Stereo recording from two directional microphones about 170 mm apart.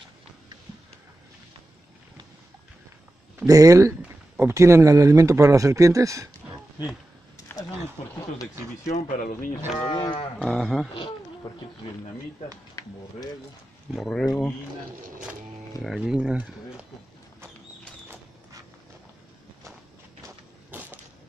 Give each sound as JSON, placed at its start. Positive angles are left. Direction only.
{"t": 3.3, "sound": "speech", "side_deg": -20}
{"t": 8.1, "sound": "speech", "side_deg": 20}
{"t": 8.8, "sound": "speech", "side_deg": 50}
{"t": 9.8, "sound": "cattle", "side_deg": 30}
{"t": 10.4, "sound": "speech", "side_deg": 0}
{"t": 13.9, "sound": "speech", "side_deg": 5}
{"t": 15.8, "sound": "speech", "side_deg": -5}
{"t": 20.2, "sound": "walk", "side_deg": -10}